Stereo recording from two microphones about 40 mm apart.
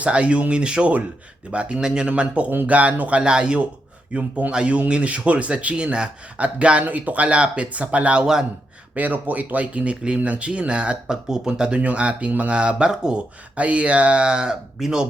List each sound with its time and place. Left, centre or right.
0.0 s speech: right
2.0 s speech: right
4.1 s speech: right
6.8 s speech: right
9.0 s speech: right
9.9 s speech: right
11.0 s speech: centre
11.4 s speech: right
13.6 s speech: right; by 15.0 s centre